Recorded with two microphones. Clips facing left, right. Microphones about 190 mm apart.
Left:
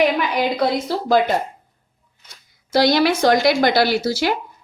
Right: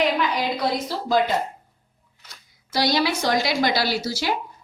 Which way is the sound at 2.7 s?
55° left (ahead or behind).